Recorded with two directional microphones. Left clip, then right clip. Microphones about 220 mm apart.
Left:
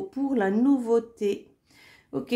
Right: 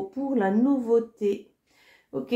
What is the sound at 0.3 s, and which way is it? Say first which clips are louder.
Speech: even; 35° left (ahead or behind).